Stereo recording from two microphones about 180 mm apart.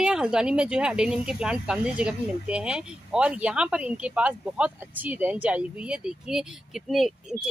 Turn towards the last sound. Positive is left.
turn(degrees=0)  # may be behind; listen again after turning